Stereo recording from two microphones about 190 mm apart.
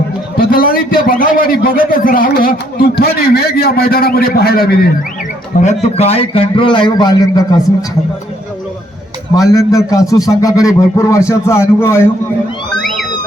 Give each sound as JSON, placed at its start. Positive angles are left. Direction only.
{"t": 0.3, "sound": "a man's voice", "side_deg": 50}
{"t": 5.5, "sound": "a man's voice", "side_deg": 35}
{"t": 9.3, "sound": "a man's voice", "side_deg": 20}